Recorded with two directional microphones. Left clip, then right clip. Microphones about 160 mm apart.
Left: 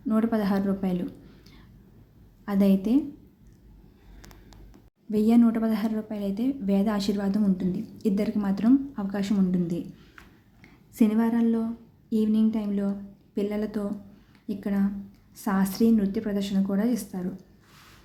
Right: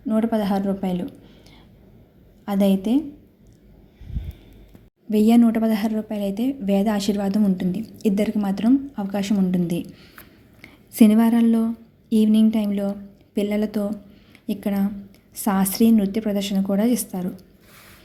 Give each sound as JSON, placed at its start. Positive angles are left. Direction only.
{"t": 0.1, "sound": "speech", "side_deg": -10}
{"t": 2.4, "sound": "speech", "side_deg": -15}
{"t": 5.1, "sound": "a woman's voice", "side_deg": -20}